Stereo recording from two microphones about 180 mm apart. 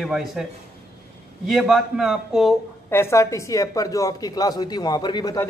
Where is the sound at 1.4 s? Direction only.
Centre (ahead or behind).